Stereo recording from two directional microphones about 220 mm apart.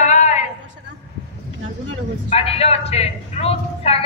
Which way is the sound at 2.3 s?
25° left (ahead or behind).